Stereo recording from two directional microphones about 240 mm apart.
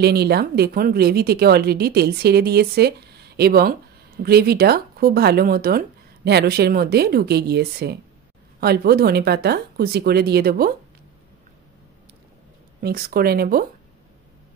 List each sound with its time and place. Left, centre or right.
0.0 s speech: right
12.8 s speech: right